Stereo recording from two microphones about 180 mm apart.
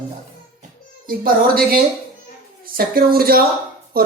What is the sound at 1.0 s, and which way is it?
A woman's voice, 50° right (ahead or behind).